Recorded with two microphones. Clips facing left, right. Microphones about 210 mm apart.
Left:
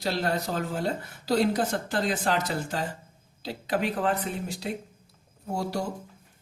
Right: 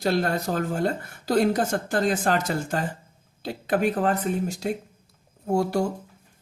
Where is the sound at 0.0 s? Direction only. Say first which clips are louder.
Right 4 dB; 50° right (ahead or behind).